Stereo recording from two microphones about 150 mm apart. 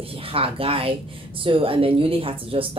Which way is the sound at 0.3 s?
40° right (ahead or behind).